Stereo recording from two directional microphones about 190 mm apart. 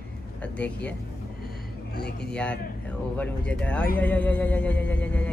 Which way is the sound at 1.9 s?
60° left (ahead or behind).